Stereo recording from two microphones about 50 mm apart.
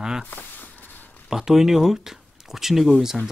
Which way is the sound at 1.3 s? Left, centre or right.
Centre.